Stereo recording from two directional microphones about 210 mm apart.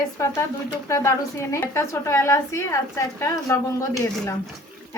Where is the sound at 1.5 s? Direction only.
15° left (ahead or behind).